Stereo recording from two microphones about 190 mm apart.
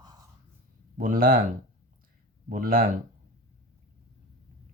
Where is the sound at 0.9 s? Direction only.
50° right (ahead or behind).